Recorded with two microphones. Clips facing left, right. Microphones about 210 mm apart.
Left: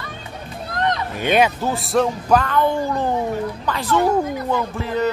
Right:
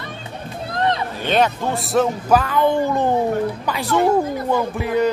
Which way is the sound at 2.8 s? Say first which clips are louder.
Right 3 dB; 20° right (ahead or behind).